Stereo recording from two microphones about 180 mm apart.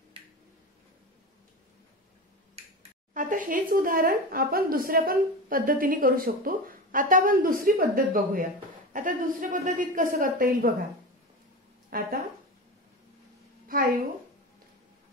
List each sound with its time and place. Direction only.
3.2 s a woman's voice: 45° right (ahead or behind)
11.9 s speech: 55° right (ahead or behind)